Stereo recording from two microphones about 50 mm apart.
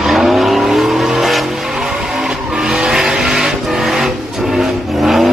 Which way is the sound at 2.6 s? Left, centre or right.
Centre.